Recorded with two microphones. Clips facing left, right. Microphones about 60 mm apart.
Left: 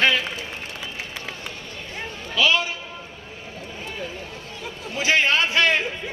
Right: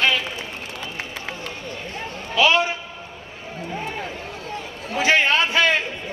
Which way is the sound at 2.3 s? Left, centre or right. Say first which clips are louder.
Right 3 dB; right.